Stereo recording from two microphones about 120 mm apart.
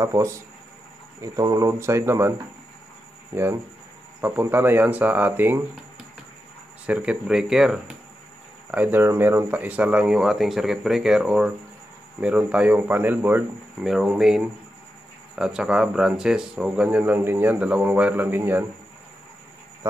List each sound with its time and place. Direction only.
0.0 s speech: 25° right (ahead or behind)
4.2 s speech: 20° right (ahead or behind)
6.9 s speech: 10° right (ahead or behind)
8.7 s speech: 15° right (ahead or behind)